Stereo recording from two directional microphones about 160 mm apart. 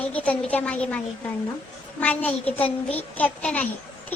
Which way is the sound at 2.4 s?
40° left (ahead or behind).